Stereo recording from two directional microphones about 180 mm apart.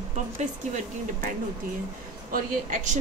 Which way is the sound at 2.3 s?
45° right (ahead or behind).